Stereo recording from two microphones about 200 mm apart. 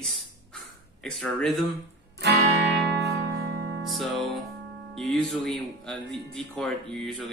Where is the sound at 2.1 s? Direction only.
60° right (ahead or behind).